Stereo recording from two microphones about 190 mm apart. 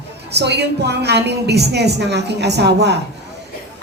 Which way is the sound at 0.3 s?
60° right (ahead or behind).